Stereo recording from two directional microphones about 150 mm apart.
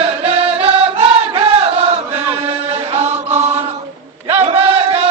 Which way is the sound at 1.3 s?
40° right (ahead or behind).